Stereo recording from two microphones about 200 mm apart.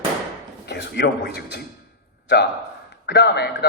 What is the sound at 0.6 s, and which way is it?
Speech, 55° left (ahead or behind).